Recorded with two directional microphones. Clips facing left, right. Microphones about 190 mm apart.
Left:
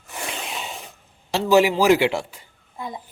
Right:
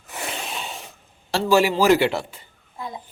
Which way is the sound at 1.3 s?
15° left (ahead or behind).